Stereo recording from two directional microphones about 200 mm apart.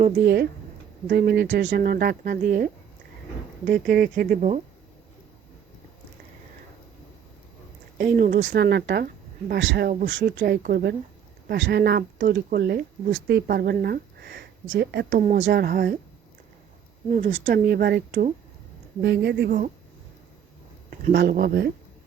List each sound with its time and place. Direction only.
0.0 s speech: 50° right (ahead or behind)
7.9 s speech: 45° right (ahead or behind)
8.4 s speech: 60° right (ahead or behind)
15.2 s a woman's voice: 40° right (ahead or behind)
15.4 s speech: 50° right (ahead or behind)
17.1 s a woman's voice: 40° right (ahead or behind)
21.1 s speech: 55° right (ahead or behind)